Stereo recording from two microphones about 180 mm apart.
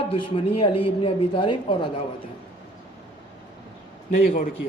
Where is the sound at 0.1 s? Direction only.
30° left (ahead or behind).